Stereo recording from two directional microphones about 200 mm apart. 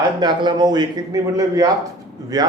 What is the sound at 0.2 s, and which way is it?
Speech, 20° right (ahead or behind).